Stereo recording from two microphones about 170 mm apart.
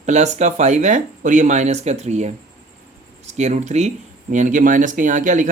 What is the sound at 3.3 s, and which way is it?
A man's voice, 40° right (ahead or behind).